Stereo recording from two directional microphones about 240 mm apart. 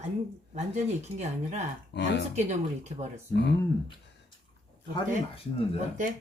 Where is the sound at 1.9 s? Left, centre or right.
Left.